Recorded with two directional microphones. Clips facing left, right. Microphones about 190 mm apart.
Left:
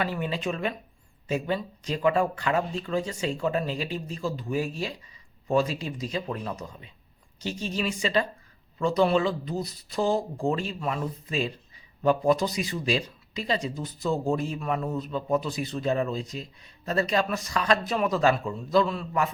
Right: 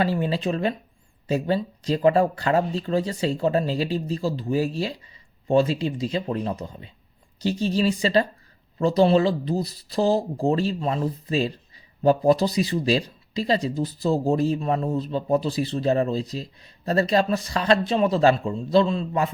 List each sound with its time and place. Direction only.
0.0 s speech: 30° right (ahead or behind)